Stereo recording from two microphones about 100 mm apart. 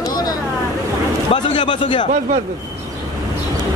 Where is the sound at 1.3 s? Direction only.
55° left (ahead or behind).